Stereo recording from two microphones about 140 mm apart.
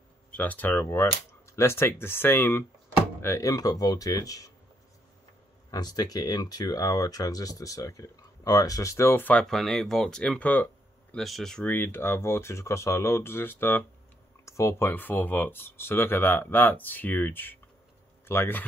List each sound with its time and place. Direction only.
0.3 s speech: 10° left (ahead or behind)
5.7 s speech: 30° left (ahead or behind)